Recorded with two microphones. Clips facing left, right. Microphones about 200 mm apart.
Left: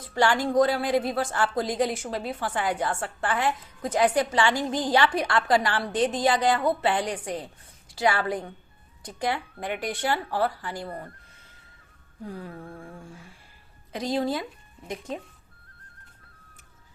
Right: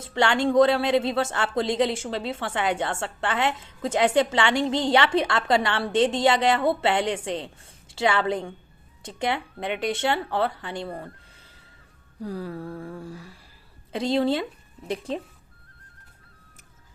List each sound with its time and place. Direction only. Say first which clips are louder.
0.0 s a woman's voice: right 1 dB; 25° right (ahead or behind)
12.2 s a sound: right 5 dB; 35° right (ahead or behind)
13.9 s a woman's voice: right 4 dB; 25° right (ahead or behind)